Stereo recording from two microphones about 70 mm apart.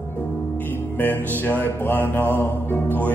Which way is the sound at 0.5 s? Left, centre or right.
Left.